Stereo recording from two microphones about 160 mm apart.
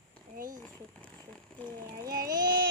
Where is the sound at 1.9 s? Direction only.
20° right (ahead or behind).